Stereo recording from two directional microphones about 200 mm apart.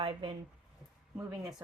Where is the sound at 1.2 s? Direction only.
15° right (ahead or behind).